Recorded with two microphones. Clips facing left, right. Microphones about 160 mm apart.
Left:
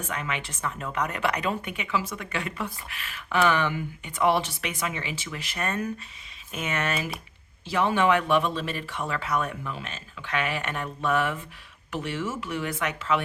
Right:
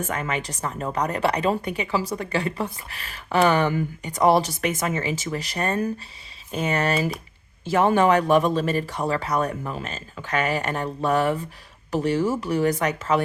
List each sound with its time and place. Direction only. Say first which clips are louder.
0.0 s speech: right 5 dB; 45° right (ahead or behind)